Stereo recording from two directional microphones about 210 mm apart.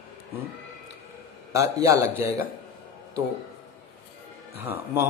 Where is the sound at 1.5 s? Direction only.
15° right (ahead or behind).